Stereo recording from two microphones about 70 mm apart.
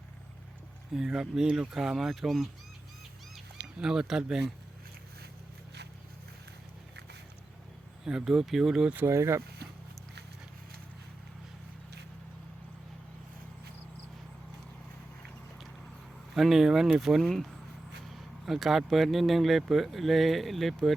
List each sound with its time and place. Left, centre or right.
0.9 s speech: centre
3.8 s speech: centre
8.0 s speech: centre
9.0 s speech: right
16.3 s speech: centre